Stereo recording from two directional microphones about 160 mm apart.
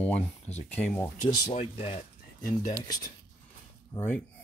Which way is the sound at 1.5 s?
40° left (ahead or behind).